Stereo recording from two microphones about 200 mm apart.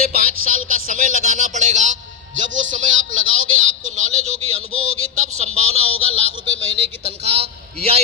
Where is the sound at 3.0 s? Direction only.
80° right.